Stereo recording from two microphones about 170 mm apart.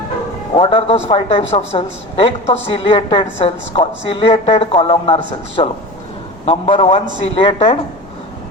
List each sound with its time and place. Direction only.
0.5 s a woman's voice: 30° left (ahead or behind)